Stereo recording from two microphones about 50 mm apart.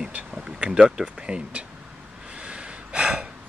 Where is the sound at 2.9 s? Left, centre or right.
Centre.